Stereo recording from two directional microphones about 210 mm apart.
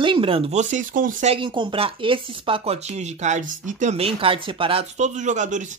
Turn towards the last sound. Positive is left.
turn(degrees=-35)  # may be behind; listen again after turning